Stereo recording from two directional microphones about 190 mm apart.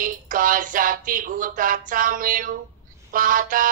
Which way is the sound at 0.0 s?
45° right (ahead or behind).